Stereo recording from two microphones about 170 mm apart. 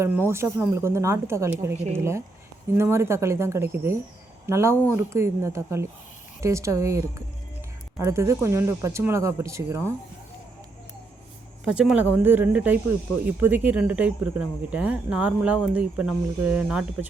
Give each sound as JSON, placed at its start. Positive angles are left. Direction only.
{"t": 0.0, "sound": "speech", "side_deg": -15}
{"t": 11.6, "sound": "speech", "side_deg": -5}